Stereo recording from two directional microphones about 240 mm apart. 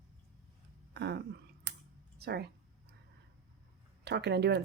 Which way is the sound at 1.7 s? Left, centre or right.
Right.